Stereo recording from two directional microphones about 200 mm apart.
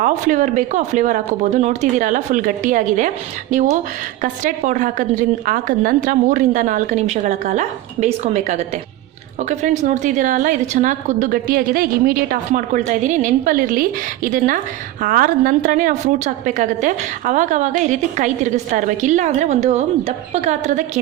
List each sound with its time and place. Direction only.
0.0 s a woman's voice: 40° right (ahead or behind)